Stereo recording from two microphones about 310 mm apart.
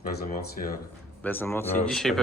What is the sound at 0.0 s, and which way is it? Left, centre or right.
Speech, left.